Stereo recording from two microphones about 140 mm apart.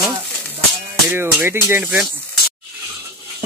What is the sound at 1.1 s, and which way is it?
Speech, 15° right (ahead or behind).